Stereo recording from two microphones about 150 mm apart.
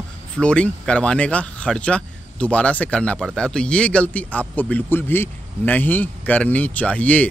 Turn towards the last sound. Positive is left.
turn(degrees=10)  # may be behind; listen again after turning